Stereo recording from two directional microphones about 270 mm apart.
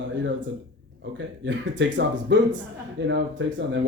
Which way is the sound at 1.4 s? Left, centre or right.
Right.